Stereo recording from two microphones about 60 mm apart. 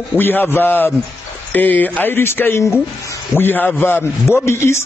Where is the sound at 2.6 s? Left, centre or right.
Left.